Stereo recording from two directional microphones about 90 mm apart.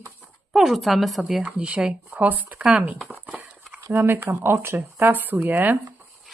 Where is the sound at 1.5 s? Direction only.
10° right (ahead or behind).